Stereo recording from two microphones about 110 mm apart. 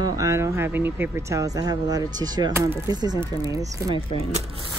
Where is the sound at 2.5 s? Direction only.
25° right (ahead or behind).